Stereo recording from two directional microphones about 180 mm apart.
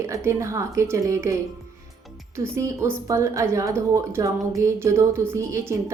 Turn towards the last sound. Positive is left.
turn(degrees=-15)  # may be behind; listen again after turning